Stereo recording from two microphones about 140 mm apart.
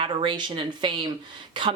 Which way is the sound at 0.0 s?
35° right (ahead or behind).